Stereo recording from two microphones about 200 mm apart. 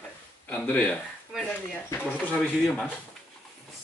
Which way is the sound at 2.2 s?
5° left (ahead or behind).